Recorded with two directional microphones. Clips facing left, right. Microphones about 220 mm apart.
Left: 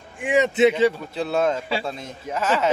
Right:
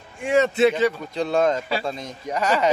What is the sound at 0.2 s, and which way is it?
Speech, 15° left (ahead or behind).